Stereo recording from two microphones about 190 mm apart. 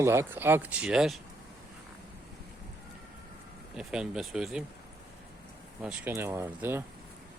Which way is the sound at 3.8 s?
5° right (ahead or behind).